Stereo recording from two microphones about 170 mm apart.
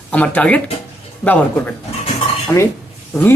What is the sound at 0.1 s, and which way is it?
Speech, 10° left (ahead or behind).